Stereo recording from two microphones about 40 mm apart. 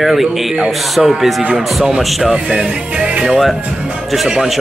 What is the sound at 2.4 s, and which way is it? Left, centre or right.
Music, centre.